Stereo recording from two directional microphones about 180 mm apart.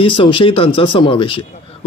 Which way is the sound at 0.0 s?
30° left (ahead or behind).